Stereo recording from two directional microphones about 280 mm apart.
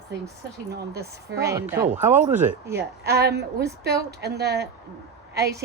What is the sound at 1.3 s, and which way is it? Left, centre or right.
Speech, centre.